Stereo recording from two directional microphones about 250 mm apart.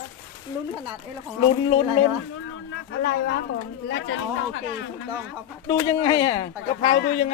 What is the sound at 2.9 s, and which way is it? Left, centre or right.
Speech, left.